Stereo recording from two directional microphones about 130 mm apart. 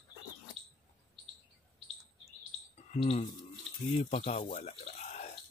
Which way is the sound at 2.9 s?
55° left (ahead or behind).